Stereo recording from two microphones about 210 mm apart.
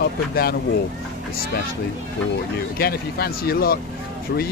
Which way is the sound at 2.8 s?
45° left (ahead or behind).